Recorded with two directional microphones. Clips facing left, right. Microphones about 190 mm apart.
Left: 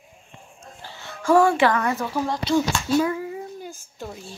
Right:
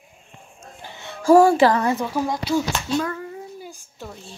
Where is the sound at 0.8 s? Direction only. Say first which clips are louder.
Right 2 dB; 20° right (ahead or behind).